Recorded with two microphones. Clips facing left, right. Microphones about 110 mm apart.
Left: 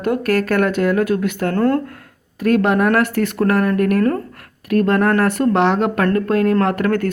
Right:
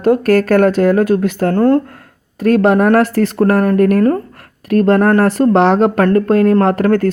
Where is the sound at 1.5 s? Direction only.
20° right (ahead or behind).